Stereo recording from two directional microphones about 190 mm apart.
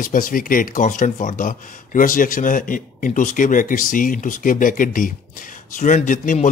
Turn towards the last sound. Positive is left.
turn(degrees=45)  # may be behind; listen again after turning